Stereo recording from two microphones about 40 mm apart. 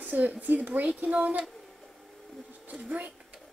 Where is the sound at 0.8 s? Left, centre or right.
Right.